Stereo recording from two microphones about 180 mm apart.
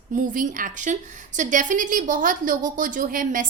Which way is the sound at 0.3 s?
50° right (ahead or behind).